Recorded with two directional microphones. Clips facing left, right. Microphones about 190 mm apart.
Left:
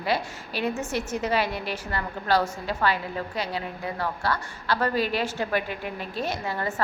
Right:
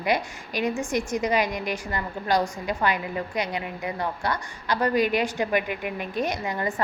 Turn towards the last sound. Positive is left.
turn(degrees=-15)  # may be behind; listen again after turning